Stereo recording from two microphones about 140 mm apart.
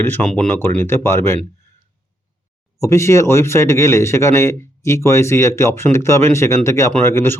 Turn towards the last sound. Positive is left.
turn(degrees=20)  # may be behind; listen again after turning